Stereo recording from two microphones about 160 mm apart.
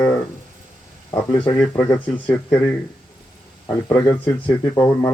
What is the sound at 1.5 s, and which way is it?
Speech, 15° left (ahead or behind).